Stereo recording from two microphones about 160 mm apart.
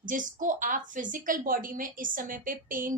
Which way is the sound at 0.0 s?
55° right (ahead or behind).